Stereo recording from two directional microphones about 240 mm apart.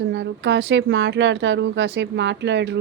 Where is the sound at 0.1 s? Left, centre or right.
Right.